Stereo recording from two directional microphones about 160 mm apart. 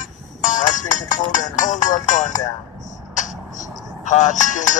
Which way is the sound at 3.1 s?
50° left (ahead or behind).